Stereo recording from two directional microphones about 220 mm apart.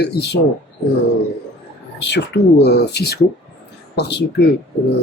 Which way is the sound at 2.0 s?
50° left (ahead or behind).